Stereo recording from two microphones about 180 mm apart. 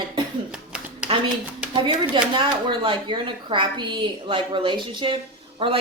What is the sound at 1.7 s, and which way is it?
Speech, 30° right (ahead or behind).